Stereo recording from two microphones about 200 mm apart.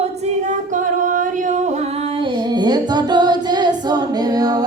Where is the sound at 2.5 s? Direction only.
20° right (ahead or behind).